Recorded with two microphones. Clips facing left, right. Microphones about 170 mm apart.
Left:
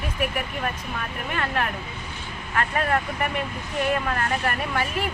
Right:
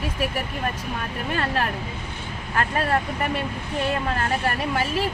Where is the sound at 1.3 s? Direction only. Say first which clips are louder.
Right 1 dB; 30° right (ahead or behind).